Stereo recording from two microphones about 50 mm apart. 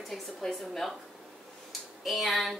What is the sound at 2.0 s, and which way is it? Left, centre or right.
Speech, centre.